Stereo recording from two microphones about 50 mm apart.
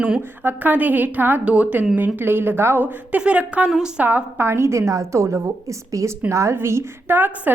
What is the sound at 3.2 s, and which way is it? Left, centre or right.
Speech, right.